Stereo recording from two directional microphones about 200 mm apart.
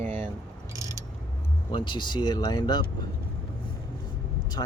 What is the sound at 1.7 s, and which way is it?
Speech, 25° left (ahead or behind).